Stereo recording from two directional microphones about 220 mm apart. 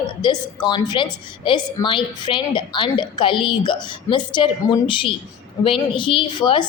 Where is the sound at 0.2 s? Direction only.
20° left (ahead or behind).